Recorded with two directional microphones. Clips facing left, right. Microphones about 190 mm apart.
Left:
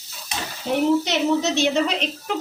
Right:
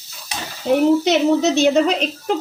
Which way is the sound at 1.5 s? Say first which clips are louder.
Right 6 dB; 45° right (ahead or behind).